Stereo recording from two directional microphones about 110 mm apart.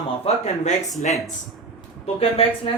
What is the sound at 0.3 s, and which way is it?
Speech, 65° left (ahead or behind).